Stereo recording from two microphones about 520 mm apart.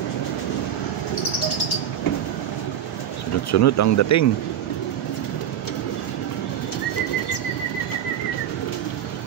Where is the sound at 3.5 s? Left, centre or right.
Left.